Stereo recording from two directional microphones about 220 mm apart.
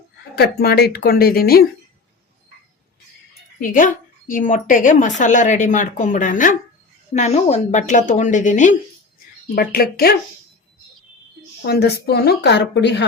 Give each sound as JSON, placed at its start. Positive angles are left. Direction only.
{"t": 0.3, "sound": "speech", "side_deg": 45}
{"t": 3.6, "sound": "speech", "side_deg": 35}
{"t": 9.6, "sound": "speech", "side_deg": 45}
{"t": 11.6, "sound": "speech", "side_deg": 45}